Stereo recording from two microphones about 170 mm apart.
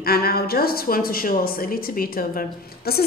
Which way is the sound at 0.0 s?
65° left (ahead or behind).